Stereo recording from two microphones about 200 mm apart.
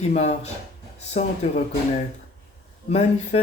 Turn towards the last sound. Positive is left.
turn(degrees=30)  # may be behind; listen again after turning